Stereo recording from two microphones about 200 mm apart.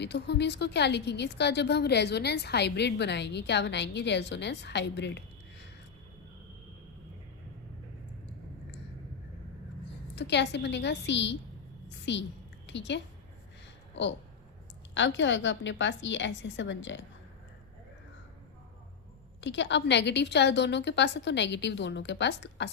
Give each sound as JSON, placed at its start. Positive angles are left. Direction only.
{"t": 0.0, "sound": "a woman's voice", "side_deg": 60}
{"t": 10.2, "sound": "a woman's voice", "side_deg": 60}
{"t": 11.9, "sound": "a sound", "side_deg": 60}
{"t": 12.6, "sound": "a woman's voice", "side_deg": 60}
{"t": 14.9, "sound": "a woman's voice", "side_deg": 65}
{"t": 19.4, "sound": "a woman's voice", "side_deg": 65}